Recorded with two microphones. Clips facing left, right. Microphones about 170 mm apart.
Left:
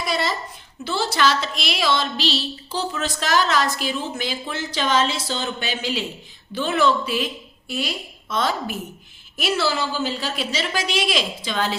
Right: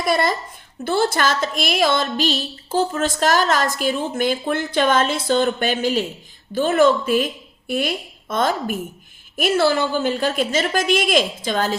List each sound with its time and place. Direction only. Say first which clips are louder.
0.0 s a woman's voice: right 5 dB; 50° right (ahead or behind)